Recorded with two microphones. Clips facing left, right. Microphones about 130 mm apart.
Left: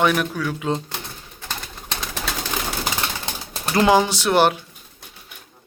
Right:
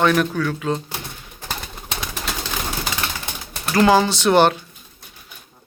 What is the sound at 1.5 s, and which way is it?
Bird, 10° right (ahead or behind).